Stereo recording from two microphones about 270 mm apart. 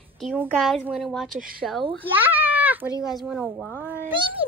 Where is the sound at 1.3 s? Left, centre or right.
Right.